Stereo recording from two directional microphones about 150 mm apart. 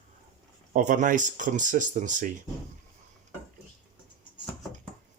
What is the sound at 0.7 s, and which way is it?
Speech, 60° right (ahead or behind).